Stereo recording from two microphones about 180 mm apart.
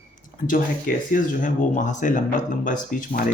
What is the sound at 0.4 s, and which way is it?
Speech, 50° left (ahead or behind).